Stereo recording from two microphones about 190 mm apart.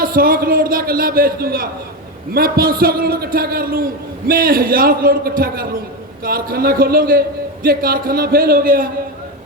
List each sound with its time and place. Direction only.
0.0 s a man's voice: 50° right (ahead or behind)